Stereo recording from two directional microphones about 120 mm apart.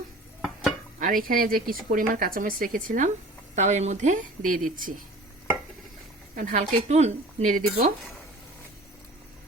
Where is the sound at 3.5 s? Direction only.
75° right (ahead or behind); by 4.9 s 90° right.